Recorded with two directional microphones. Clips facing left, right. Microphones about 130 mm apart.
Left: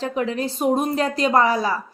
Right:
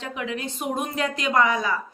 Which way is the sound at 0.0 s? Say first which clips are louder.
Left 7 dB; 35° left (ahead or behind).